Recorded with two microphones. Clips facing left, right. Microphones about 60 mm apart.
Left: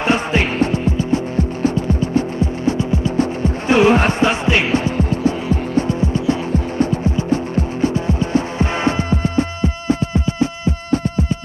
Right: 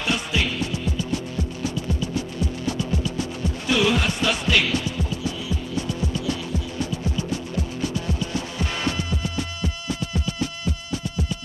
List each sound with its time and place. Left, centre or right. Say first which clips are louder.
0.0 s music: left 8 dB; left